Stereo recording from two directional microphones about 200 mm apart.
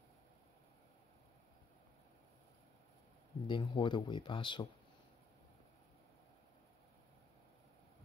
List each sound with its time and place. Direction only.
3.4 s speech: 25° left (ahead or behind)